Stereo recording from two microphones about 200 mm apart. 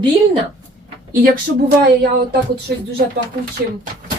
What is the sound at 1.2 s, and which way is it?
Speech, 50° right (ahead or behind).